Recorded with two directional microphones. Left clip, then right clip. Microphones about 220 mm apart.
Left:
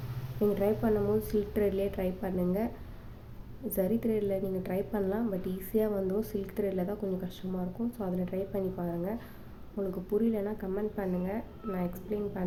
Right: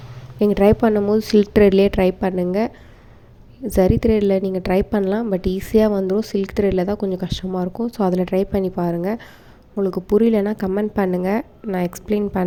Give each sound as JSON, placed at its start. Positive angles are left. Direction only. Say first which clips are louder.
{"t": 0.3, "sound": "a woman's voice", "louder": "right 13 dB", "side_deg": -40}
{"t": 3.7, "sound": "a woman's voice", "louder": "right 14 dB", "side_deg": -40}